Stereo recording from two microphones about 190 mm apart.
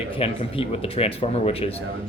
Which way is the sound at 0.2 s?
30° left (ahead or behind).